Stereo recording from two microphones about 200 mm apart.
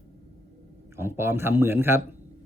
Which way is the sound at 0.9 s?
10° right (ahead or behind).